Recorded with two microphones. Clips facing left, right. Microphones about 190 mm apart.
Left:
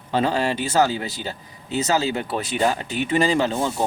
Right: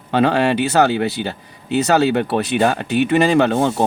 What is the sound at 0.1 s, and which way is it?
Speech, 65° right (ahead or behind).